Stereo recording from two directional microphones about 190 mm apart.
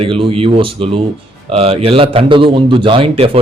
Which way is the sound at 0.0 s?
30° right (ahead or behind).